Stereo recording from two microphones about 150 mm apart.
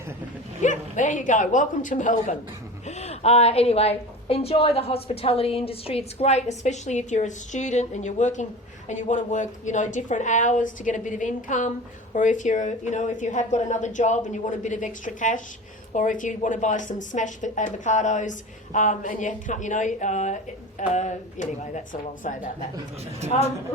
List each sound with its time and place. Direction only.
0.6 s a woman's voice: 55° left (ahead or behind)
2.8 s a woman's voice: 50° left (ahead or behind)
23.3 s a woman's voice: 45° left (ahead or behind)